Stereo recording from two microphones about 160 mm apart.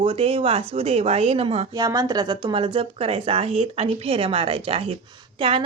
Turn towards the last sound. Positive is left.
turn(degrees=-35)  # may be behind; listen again after turning